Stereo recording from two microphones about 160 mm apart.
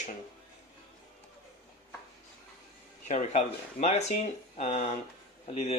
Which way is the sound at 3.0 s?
45° left (ahead or behind).